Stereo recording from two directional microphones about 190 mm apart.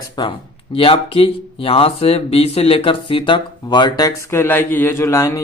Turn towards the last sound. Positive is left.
turn(degrees=15)  # may be behind; listen again after turning